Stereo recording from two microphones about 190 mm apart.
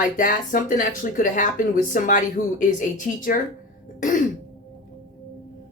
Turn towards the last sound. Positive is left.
turn(degrees=45)  # may be behind; listen again after turning